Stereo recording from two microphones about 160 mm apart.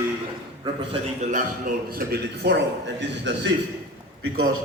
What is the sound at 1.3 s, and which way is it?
A man's voice, 65° right (ahead or behind).